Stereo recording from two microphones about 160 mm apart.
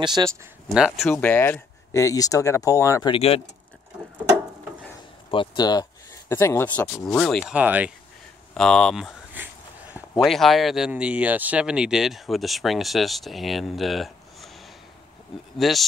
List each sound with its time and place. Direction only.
0.0 s speech: 25° right (ahead or behind)
0.7 s speech: 5° right (ahead or behind)
1.1 s speech: 10° left (ahead or behind)
3.1 s speech: 40° left (ahead or behind)
5.3 s speech: 30° left (ahead or behind)
6.8 s speech: 5° left (ahead or behind)
8.5 s speech: 5° left (ahead or behind)
9.3 s a sound: 10° right (ahead or behind)
10.2 s speech: centre (ahead or behind)
15.5 s speech: centre (ahead or behind)